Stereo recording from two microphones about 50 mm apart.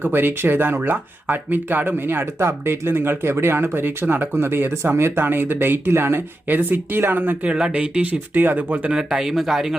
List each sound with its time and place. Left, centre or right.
0.0 s speech: right
5.9 s speech: right
7.4 s speech: right
8.3 s speech: right
8.9 s speech: centre